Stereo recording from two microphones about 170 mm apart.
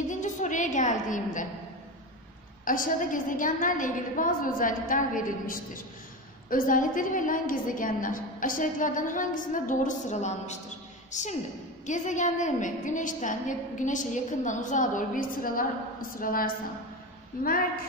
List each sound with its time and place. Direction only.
0.1 s a woman's voice: 45° left (ahead or behind)
2.6 s a woman's voice: 55° left (ahead or behind)